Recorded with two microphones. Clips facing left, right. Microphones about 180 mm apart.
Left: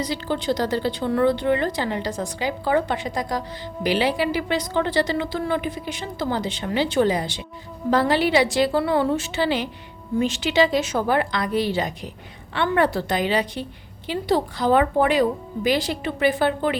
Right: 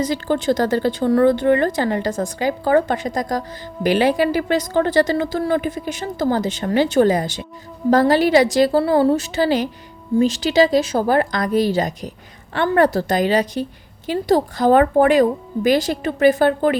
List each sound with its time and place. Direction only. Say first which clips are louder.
0.0 s a woman's voice: right 5 dB; 45° right (ahead or behind)